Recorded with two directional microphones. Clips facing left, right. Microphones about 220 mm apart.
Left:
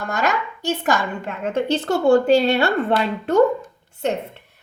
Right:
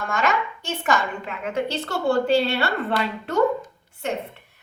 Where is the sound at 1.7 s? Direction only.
50° left (ahead or behind).